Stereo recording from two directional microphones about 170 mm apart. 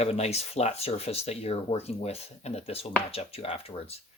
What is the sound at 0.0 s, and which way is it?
Speech, 40° left (ahead or behind).